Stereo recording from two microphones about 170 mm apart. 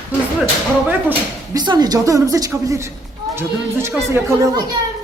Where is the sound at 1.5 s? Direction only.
25° right (ahead or behind).